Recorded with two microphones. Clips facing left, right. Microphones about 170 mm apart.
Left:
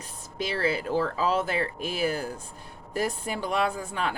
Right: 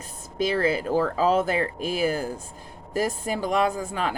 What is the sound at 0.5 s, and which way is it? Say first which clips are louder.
Speech: right 2 dB; 40° right (ahead or behind).